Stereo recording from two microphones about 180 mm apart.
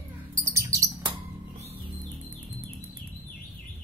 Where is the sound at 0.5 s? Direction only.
15° right (ahead or behind).